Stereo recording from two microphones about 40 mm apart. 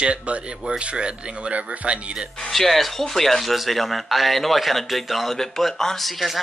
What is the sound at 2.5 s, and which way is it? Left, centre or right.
Speech, centre.